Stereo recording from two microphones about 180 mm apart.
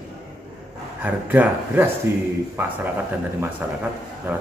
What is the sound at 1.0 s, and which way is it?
Speech, 10° right (ahead or behind).